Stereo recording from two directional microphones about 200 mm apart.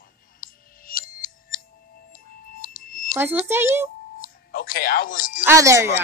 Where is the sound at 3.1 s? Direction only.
10° right (ahead or behind).